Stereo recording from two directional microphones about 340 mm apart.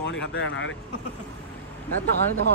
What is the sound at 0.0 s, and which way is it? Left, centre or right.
Speech, left.